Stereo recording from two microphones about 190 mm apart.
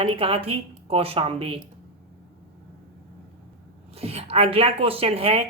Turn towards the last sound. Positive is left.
turn(degrees=-30)  # may be behind; listen again after turning